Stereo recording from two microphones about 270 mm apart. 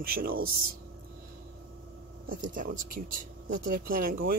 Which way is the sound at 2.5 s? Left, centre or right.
Right.